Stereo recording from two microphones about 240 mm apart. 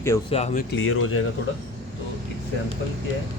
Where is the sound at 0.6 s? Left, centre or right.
Left.